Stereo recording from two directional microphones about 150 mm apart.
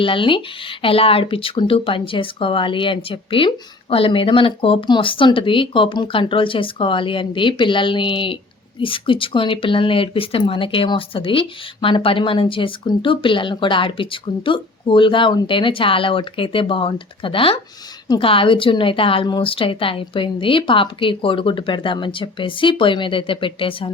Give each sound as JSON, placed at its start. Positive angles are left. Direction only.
{"t": 0.0, "sound": "speech", "side_deg": 35}